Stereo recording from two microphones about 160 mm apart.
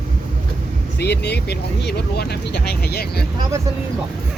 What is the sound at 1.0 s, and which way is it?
Speech, 90° left.